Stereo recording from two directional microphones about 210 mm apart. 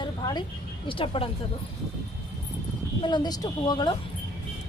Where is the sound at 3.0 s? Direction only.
20° left (ahead or behind).